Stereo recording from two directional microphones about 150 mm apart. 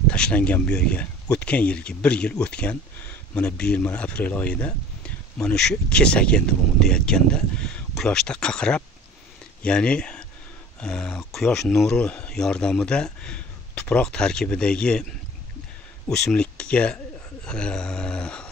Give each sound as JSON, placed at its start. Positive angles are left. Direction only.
{"t": 0.1, "sound": "speech", "side_deg": 5}